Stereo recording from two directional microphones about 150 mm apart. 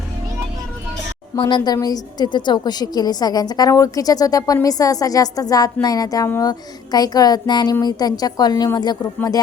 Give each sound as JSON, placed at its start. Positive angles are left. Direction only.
{"t": 1.4, "sound": "a woman's voice", "side_deg": 30}